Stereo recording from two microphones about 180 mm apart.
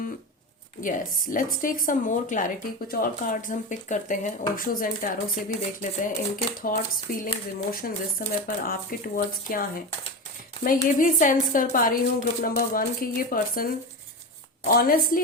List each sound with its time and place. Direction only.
0.8 s a woman's voice: 50° left (ahead or behind)
10.9 s a woman's voice: 50° left (ahead or behind)